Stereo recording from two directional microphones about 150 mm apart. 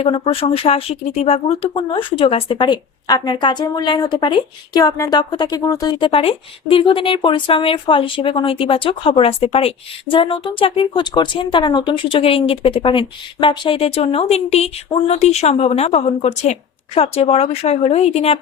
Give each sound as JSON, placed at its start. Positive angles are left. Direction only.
{"t": 0.0, "sound": "speech", "side_deg": 40}